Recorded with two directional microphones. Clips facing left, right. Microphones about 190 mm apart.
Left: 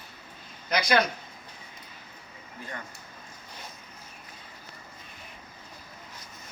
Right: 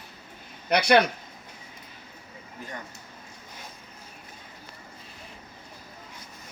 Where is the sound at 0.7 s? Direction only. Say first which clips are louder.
Right 5 dB; 65° right (ahead or behind).